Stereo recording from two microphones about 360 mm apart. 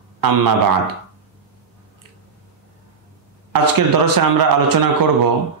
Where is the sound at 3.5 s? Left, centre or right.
Right.